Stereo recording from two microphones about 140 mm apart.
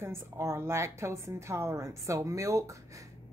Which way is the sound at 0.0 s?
20° right (ahead or behind).